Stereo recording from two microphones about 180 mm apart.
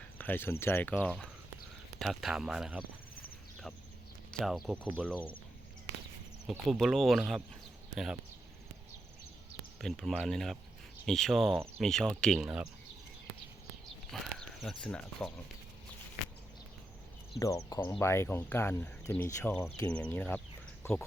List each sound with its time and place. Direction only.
0.2 s speech: 10° left (ahead or behind); by 2.8 s 5° right (ahead or behind)
4.3 s speech: centre (ahead or behind)
6.7 s speech: centre (ahead or behind)
9.8 s speech: centre (ahead or behind)
14.1 s speech: centre (ahead or behind)
17.4 s speech: 20° left (ahead or behind)